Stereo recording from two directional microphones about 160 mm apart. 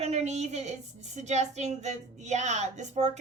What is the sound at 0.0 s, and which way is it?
A woman's voice, 45° right (ahead or behind).